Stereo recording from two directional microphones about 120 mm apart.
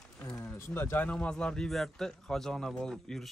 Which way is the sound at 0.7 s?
20° left (ahead or behind).